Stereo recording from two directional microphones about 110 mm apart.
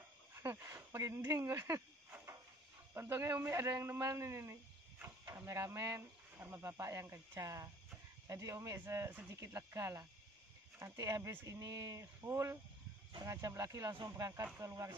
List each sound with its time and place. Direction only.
0.3 s speech: 25° right (ahead or behind)